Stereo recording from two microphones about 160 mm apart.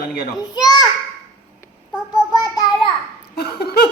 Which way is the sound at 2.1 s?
25° left (ahead or behind).